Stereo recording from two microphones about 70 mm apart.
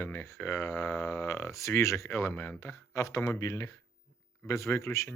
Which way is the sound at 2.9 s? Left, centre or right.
Left.